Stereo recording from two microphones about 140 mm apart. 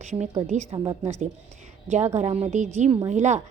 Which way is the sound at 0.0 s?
50° right (ahead or behind).